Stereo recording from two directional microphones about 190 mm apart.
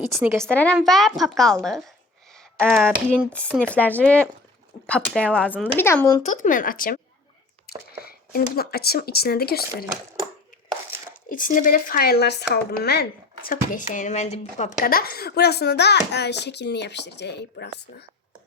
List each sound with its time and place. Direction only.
0.2 s a woman's voice: 10° right (ahead or behind)
0.4 s a woman's voice: 5° left (ahead or behind)
2.6 s a woman's voice: 5° left (ahead or behind)
6.2 s speech: 40° left (ahead or behind)
8.0 s a child's voice: 55° left (ahead or behind)
11.3 s speech: 45° left (ahead or behind)
14.8 s a child's voice: 50° left (ahead or behind)